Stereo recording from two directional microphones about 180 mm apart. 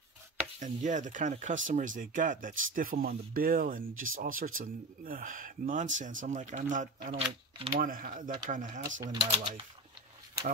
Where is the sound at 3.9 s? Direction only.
90° right.